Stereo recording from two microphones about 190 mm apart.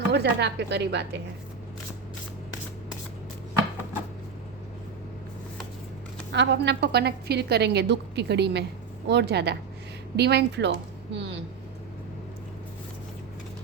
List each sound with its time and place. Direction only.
0.1 s a woman's voice: 65° right (ahead or behind)
6.3 s a woman's voice: 70° right (ahead or behind)